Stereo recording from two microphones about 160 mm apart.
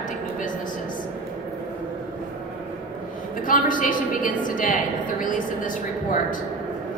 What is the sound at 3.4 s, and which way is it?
A woman's voice, 55° left (ahead or behind).